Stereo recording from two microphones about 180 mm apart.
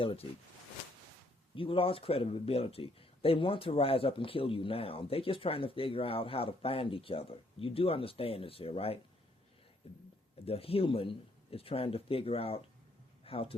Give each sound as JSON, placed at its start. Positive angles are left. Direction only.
{"t": 0.0, "sound": "speech", "side_deg": 30}
{"t": 1.5, "sound": "speech", "side_deg": 30}